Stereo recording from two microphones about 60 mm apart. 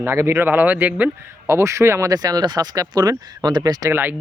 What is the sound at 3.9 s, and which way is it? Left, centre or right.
Speech, right.